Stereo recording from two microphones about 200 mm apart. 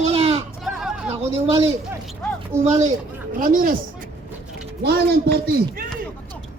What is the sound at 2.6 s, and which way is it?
Speech, 35° right (ahead or behind).